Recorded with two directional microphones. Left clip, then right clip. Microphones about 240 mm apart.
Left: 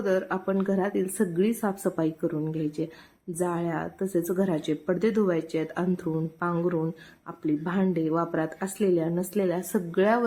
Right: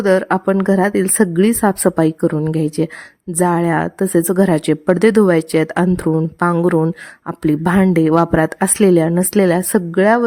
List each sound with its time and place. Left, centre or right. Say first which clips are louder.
0.0 s a woman's voice: right 12 dB; right